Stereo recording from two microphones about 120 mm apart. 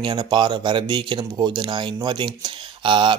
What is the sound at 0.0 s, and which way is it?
Speech, 40° right (ahead or behind).